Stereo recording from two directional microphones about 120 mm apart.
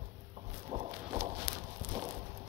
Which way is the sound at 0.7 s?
50° right (ahead or behind).